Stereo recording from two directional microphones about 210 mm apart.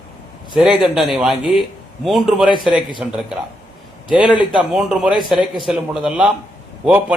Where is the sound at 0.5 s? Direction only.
Centre (ahead or behind).